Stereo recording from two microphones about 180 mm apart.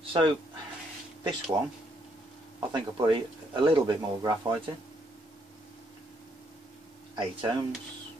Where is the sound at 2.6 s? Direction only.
25° right (ahead or behind).